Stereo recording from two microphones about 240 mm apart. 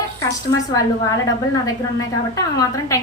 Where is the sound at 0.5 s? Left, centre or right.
Centre.